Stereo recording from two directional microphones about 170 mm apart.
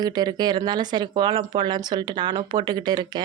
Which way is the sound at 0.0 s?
25° right (ahead or behind).